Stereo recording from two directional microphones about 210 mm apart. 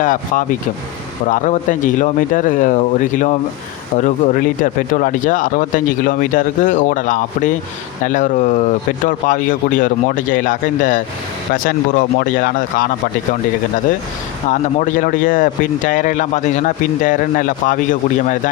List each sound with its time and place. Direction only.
0.0 s speech: 40° left (ahead or behind)
14.5 s speech: 35° left (ahead or behind)